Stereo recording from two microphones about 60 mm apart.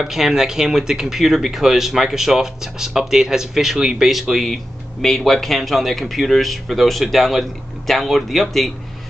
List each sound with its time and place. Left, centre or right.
0.0 s speech: centre